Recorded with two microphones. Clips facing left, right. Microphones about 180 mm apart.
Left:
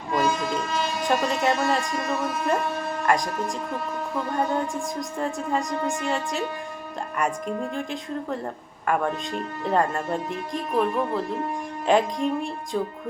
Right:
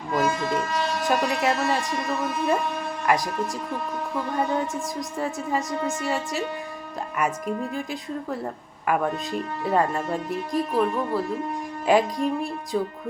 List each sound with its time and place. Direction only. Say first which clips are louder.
0.1 s a woman's voice: even; centre (ahead or behind)